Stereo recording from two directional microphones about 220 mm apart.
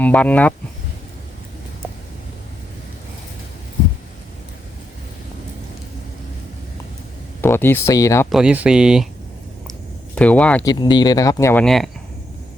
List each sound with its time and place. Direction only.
0.0 s speech: 5° left (ahead or behind)
7.4 s speech: 10° left (ahead or behind)
8.3 s speech: 5° right (ahead or behind)
10.2 s speech: 5° left (ahead or behind)
10.7 s speech: 20° left (ahead or behind)
11.6 s speech: centre (ahead or behind)